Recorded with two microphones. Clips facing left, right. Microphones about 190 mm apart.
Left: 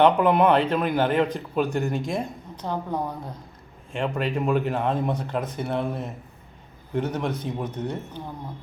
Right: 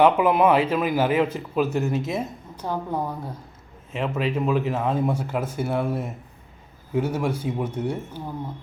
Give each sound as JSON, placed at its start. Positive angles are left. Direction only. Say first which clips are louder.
{"t": 0.0, "sound": "a man's voice", "louder": "even", "side_deg": -5}
{"t": 3.9, "sound": "a man's voice", "louder": "right 1 dB", "side_deg": -5}